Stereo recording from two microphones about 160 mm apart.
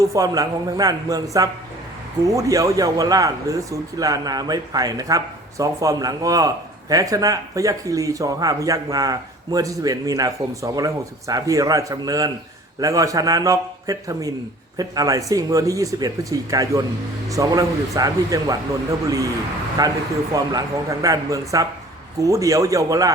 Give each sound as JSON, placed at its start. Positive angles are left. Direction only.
{"t": 0.0, "sound": "speech", "side_deg": -20}
{"t": 19.8, "sound": "speech", "side_deg": -25}